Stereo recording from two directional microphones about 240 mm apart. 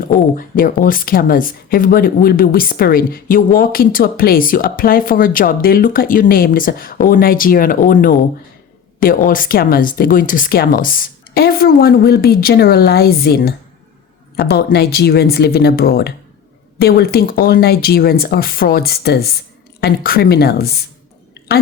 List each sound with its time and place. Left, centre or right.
0.3 s speech: left